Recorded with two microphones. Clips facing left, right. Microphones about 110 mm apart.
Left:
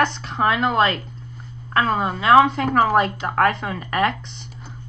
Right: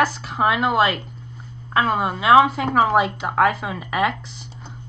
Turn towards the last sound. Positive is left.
turn(degrees=-5)  # may be behind; listen again after turning